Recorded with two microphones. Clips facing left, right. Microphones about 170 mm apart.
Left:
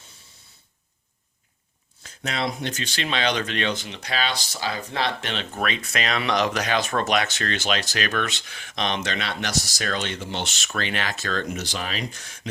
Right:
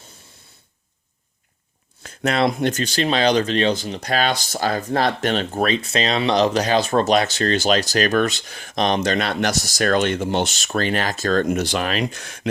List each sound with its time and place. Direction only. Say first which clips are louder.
2.0 s speech: right 8 dB; 55° right (ahead or behind)